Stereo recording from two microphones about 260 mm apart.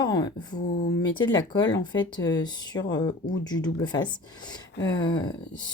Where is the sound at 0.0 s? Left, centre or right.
Centre.